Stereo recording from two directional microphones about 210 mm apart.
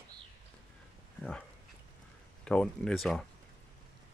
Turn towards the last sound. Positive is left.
turn(degrees=0)  # may be behind; listen again after turning